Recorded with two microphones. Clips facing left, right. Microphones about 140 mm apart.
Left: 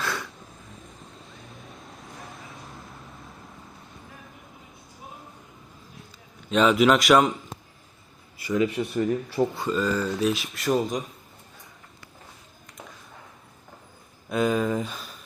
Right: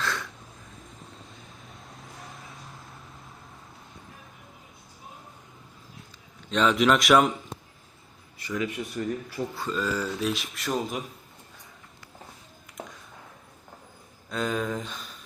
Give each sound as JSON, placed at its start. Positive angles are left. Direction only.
{"t": 0.0, "sound": "a sound", "side_deg": 10}
{"t": 6.5, "sound": "speech", "side_deg": 5}
{"t": 8.5, "sound": "speech", "side_deg": 30}
{"t": 9.7, "sound": "speech", "side_deg": -5}
{"t": 14.3, "sound": "speech", "side_deg": 10}